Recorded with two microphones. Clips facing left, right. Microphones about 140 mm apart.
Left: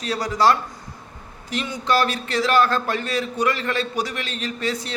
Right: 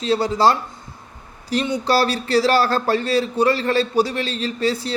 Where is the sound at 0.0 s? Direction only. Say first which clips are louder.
Right 3 dB; 25° right (ahead or behind).